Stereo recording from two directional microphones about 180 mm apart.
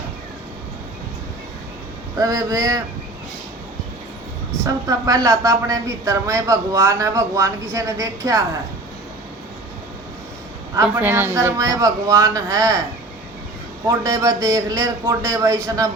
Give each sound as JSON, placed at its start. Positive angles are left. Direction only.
{"t": 2.1, "sound": "a man's voice", "side_deg": -20}
{"t": 4.6, "sound": "a woman's voice", "side_deg": -20}
{"t": 10.8, "sound": "a man's voice", "side_deg": -10}
{"t": 13.8, "sound": "a man's voice", "side_deg": -20}